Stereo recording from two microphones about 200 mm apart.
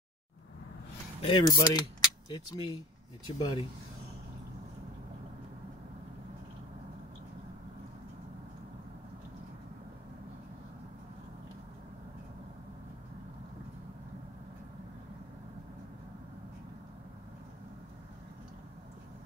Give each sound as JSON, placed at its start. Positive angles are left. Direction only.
{"t": 1.2, "sound": "speech", "side_deg": 20}